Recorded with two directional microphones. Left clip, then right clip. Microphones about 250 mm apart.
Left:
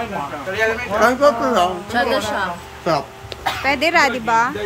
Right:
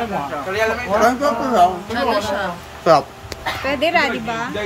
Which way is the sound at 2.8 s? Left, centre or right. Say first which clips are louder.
Right 6 dB; centre.